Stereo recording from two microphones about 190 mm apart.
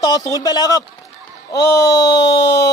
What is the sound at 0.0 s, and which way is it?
A man's voice, 20° left (ahead or behind).